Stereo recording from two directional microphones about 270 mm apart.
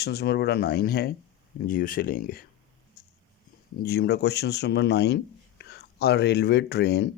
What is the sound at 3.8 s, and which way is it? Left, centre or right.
Speech, left.